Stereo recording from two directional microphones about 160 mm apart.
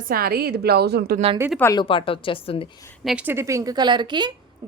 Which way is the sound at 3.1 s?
10° right (ahead or behind).